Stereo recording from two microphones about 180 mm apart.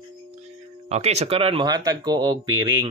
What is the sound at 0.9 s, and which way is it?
Speech, 35° right (ahead or behind).